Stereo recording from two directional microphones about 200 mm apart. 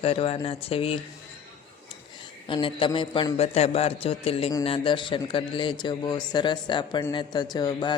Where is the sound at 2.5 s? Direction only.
25° left (ahead or behind).